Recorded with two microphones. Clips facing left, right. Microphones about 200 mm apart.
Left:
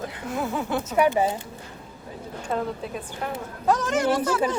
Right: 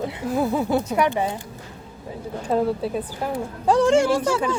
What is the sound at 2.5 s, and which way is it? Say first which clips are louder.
A woman's voice: right 7 dB; 35° right (ahead or behind).